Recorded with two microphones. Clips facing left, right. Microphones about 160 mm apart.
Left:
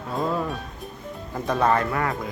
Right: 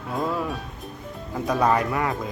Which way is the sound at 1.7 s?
15° right (ahead or behind).